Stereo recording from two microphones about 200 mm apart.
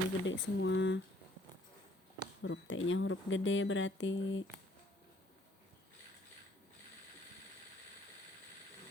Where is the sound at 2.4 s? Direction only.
70° left (ahead or behind).